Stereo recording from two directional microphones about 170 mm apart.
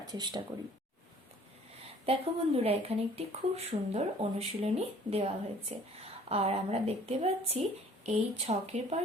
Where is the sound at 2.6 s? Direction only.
35° right (ahead or behind).